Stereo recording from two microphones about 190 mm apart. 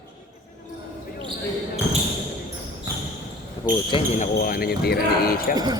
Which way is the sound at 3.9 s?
40° left (ahead or behind).